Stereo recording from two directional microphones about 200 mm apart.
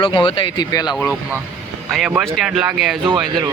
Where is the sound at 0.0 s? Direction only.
25° left (ahead or behind).